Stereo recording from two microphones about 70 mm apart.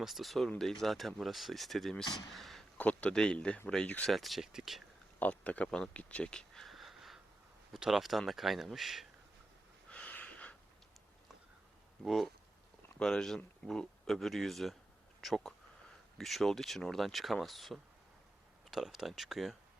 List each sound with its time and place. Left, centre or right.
0.0 s speech: centre
2.7 s speech: centre
4.0 s speech: centre
5.2 s speech: left; by 9.0 s centre
9.9 s a sound: centre
12.0 s speech: centre